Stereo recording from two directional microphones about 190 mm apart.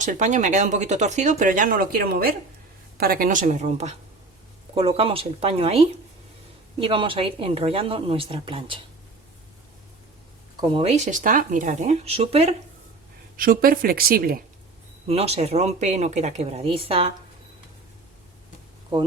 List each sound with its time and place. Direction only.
0.0 s speech: 40° right (ahead or behind)
10.6 s speech: 25° right (ahead or behind)
13.3 s speech: 50° right (ahead or behind)
15.0 s speech: 30° right (ahead or behind)